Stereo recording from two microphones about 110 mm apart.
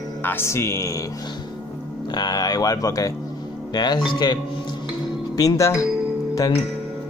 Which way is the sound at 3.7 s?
40° left (ahead or behind).